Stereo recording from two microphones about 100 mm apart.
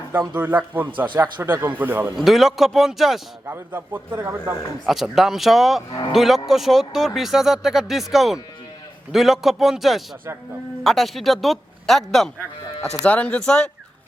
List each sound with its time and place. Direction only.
0.7 s a man's voice: 20° right (ahead or behind)
1.0 s speech: 50° right (ahead or behind)
1.4 s a man's voice: 20° right (ahead or behind)
2.1 s speech: centre (ahead or behind)
3.4 s a man's voice: 20° right (ahead or behind)
4.1 s speech: 30° right (ahead or behind)
4.9 s speech: centre (ahead or behind)
13.0 s speech: 15° left (ahead or behind)